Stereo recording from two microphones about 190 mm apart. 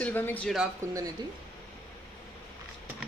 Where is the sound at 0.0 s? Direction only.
10° left (ahead or behind).